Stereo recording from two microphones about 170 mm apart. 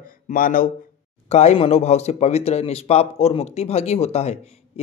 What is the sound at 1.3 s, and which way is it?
A man's voice, 40° left (ahead or behind).